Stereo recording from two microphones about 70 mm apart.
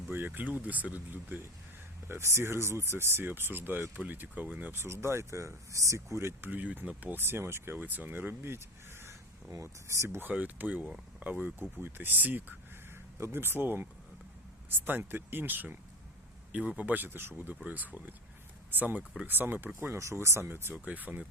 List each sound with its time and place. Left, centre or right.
0.1 s speech: right
2.0 s speech: right
4.9 s speech: right
6.5 s speech: right
9.5 s speech: right
10.2 s speech: right
13.1 s speech: right
20.0 s speech: right
20.8 s speech: right